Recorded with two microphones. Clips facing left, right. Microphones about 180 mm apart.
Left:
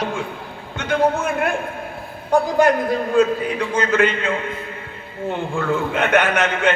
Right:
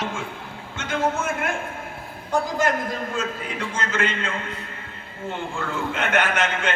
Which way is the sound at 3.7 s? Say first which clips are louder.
Left 8 dB; 60° left (ahead or behind).